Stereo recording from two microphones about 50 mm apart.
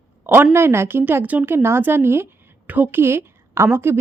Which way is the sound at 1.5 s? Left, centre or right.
Right.